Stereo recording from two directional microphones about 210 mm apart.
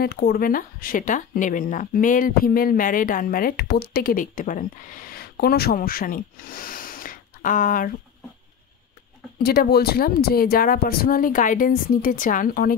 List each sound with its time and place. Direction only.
0.0 s speech: 45° left (ahead or behind)
9.4 s speech: 45° left (ahead or behind)